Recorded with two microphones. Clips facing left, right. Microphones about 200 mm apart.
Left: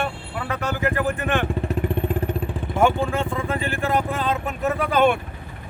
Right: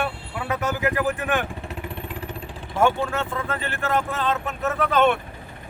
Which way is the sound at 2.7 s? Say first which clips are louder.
Left 1 dB; 10° left (ahead or behind).